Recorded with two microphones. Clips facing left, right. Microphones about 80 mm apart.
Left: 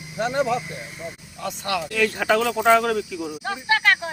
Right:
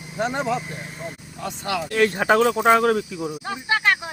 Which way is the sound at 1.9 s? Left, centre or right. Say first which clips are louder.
Right 3 dB; right.